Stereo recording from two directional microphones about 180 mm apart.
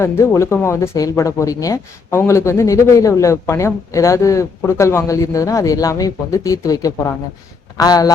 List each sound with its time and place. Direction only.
0.0 s speech: 15° left (ahead or behind)